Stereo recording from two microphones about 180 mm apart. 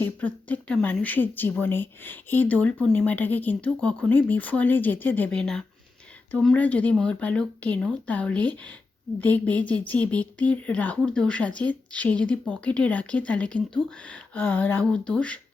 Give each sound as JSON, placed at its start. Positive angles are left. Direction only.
{"t": 0.0, "sound": "speech", "side_deg": 10}